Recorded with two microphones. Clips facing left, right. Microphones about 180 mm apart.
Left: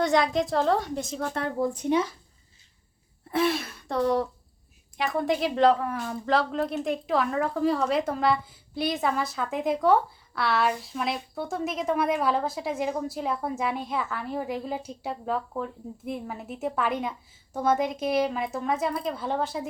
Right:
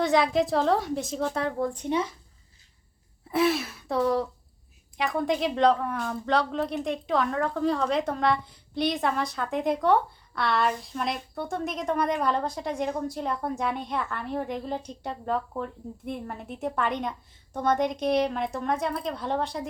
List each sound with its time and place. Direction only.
0.0 s a woman's voice: centre (ahead or behind)
3.3 s a woman's voice: centre (ahead or behind)